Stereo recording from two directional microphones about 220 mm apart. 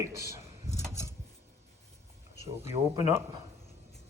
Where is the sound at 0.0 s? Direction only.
15° right (ahead or behind).